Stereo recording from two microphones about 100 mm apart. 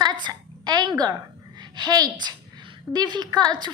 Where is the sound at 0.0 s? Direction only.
45° right (ahead or behind).